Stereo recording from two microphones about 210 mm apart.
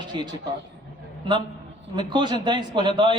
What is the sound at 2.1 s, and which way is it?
A man's voice, 20° right (ahead or behind).